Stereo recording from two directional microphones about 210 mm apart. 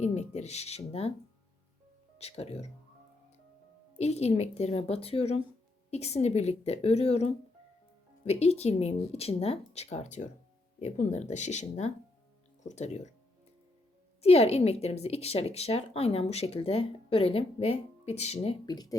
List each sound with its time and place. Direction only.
0.0 s speech: 35° left (ahead or behind)
2.1 s speech: 30° left (ahead or behind)
3.9 s speech: 30° left (ahead or behind)
14.2 s speech: 30° left (ahead or behind)
18.6 s speech: 20° left (ahead or behind)